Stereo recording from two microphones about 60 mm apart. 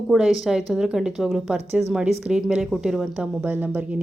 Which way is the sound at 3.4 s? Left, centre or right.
Right.